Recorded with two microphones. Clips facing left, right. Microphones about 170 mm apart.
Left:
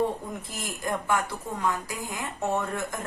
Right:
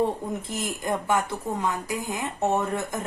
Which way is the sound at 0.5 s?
20° right (ahead or behind).